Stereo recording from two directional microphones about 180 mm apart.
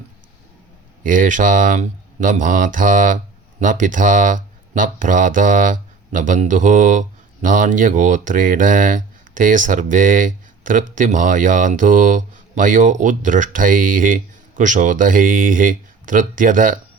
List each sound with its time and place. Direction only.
1.0 s speech: 45° right (ahead or behind)